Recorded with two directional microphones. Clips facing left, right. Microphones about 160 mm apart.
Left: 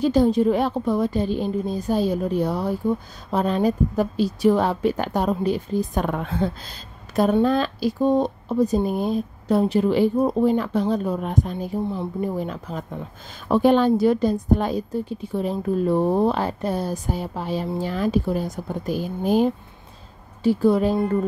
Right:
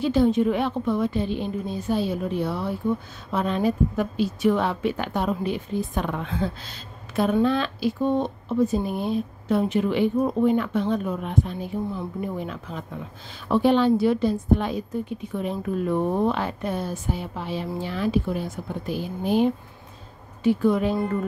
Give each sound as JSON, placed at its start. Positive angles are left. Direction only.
{"t": 0.0, "sound": "a woman's voice", "side_deg": 40}